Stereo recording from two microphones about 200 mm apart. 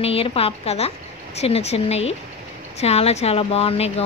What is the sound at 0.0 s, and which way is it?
A woman's voice, 30° left (ahead or behind).